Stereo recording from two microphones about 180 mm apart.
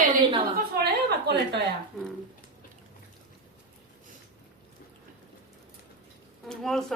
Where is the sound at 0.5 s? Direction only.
65° right (ahead or behind).